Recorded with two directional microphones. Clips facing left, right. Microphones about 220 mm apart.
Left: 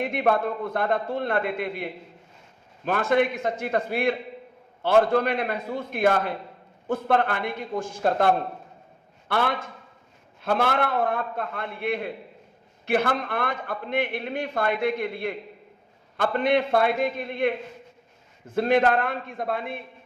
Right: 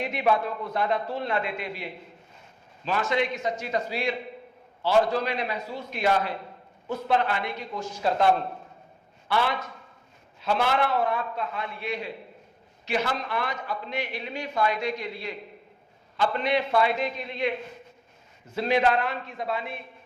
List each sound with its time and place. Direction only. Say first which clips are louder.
0.0 s a man's voice: left 2 dB; 55° left (ahead or behind)